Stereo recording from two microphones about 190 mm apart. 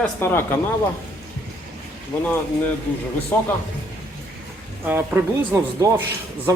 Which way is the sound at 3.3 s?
10° left (ahead or behind).